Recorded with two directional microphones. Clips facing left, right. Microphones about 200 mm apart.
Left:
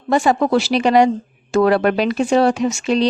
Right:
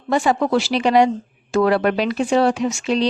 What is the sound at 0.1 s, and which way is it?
Speech, 40° left (ahead or behind).